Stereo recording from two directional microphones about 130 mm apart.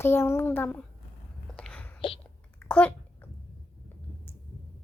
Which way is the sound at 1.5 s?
10° left (ahead or behind).